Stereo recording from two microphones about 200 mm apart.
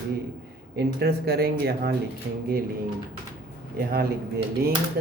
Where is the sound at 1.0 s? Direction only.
55° right (ahead or behind).